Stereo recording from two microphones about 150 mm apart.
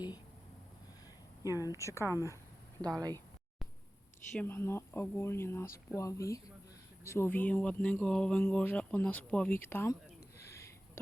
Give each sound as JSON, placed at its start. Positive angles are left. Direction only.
{"t": 1.5, "sound": "speech", "side_deg": 25}
{"t": 2.0, "sound": "speech", "side_deg": -20}
{"t": 4.4, "sound": "speech", "side_deg": 15}